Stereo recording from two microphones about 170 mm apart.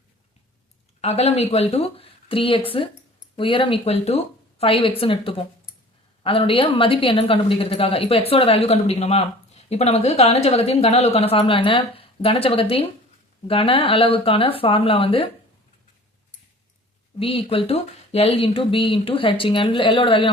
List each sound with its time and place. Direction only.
1.0 s a woman's voice: 40° left (ahead or behind)
17.2 s a woman's voice: 35° left (ahead or behind)